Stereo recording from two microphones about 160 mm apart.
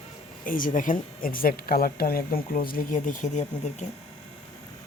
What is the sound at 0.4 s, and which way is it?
Speech, 60° left (ahead or behind).